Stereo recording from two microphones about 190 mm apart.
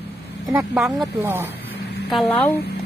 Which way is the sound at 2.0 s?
Centre (ahead or behind).